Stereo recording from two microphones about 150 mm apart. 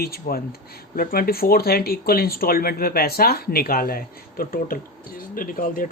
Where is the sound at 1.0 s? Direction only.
80° left.